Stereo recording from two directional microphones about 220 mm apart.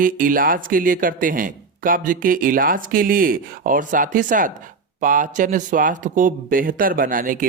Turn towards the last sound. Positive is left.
turn(degrees=-40)  # may be behind; listen again after turning